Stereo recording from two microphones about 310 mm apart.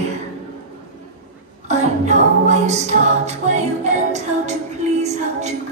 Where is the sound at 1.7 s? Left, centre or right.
Right.